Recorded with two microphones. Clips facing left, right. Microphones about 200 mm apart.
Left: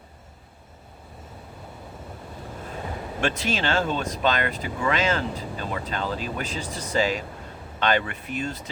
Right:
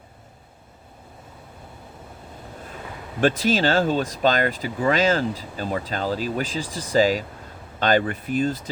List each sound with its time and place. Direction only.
3.2 s speech: 35° right (ahead or behind)